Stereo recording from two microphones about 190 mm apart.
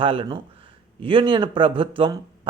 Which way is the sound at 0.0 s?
25° right (ahead or behind).